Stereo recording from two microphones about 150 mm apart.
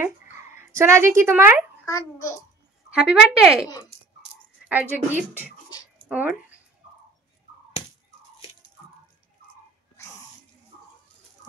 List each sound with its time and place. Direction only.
0.6 s a woman's voice: 15° right (ahead or behind)
1.9 s a child's voice: 20° left (ahead or behind)
2.9 s a woman's voice: 5° right (ahead or behind)
4.6 s speech: 10° right (ahead or behind)
6.0 s a sound: 10° right (ahead or behind)